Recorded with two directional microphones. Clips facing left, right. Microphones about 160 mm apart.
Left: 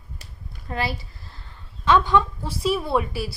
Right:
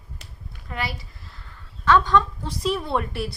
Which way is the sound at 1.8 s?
15° left (ahead or behind).